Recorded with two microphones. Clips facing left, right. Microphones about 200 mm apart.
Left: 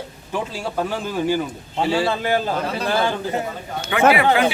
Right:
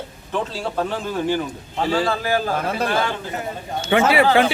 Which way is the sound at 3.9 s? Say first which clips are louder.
Right 2 dB; 30° right (ahead or behind).